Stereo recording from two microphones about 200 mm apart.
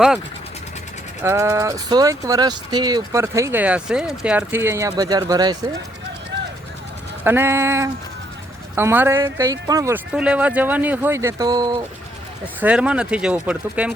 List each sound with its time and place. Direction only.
1.2 s speech: 15° right (ahead or behind)
7.3 s speech: 10° right (ahead or behind)
10.1 s speech: 5° right (ahead or behind)
12.5 s speech: 5° right (ahead or behind)